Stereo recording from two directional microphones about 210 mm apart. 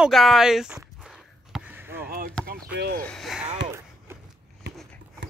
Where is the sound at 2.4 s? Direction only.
50° right (ahead or behind).